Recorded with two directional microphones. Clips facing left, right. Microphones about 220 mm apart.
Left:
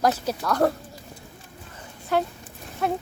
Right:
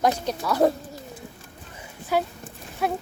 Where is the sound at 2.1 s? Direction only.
5° right (ahead or behind).